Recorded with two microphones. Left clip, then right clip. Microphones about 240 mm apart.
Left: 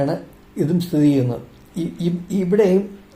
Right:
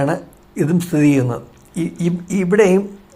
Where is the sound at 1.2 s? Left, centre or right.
Right.